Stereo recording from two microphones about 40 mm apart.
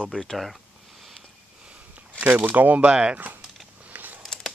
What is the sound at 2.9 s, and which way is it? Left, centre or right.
Speech, right.